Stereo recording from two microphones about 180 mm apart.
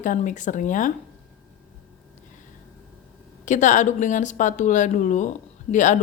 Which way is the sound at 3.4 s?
45° left (ahead or behind).